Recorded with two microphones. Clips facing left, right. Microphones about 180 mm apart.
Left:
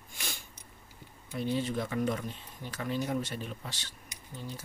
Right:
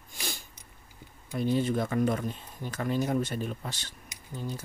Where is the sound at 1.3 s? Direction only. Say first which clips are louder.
Right 5 dB; 45° right (ahead or behind).